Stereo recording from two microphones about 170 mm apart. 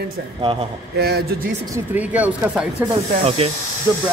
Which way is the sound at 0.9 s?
70° right (ahead or behind).